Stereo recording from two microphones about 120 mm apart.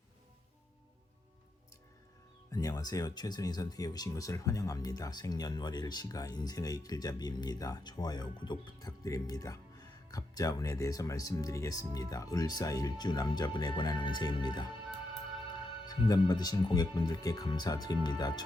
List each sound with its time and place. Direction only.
2.5 s speech: 30° left (ahead or behind)
15.9 s speech: 35° left (ahead or behind)